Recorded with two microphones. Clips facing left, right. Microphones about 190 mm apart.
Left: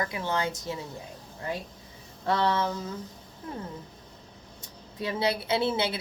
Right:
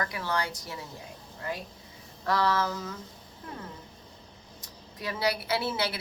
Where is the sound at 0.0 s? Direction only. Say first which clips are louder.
Left 2 dB; 20° left (ahead or behind).